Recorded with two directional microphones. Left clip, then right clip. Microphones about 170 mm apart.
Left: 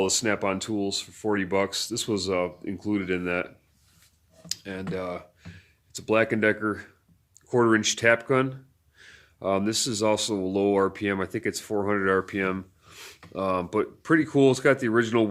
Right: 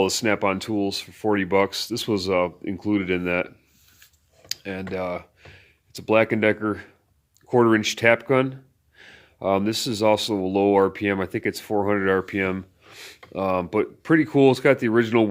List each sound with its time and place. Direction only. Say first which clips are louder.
0.0 s speech: right 4 dB; 35° right (ahead or behind)